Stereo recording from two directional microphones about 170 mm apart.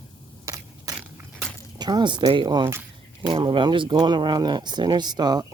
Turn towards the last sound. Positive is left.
turn(degrees=-25)  # may be behind; listen again after turning